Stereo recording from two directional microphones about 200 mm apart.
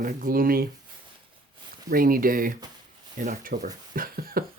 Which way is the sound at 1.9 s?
45° right (ahead or behind).